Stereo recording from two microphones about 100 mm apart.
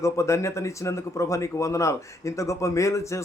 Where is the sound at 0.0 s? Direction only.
30° left (ahead or behind).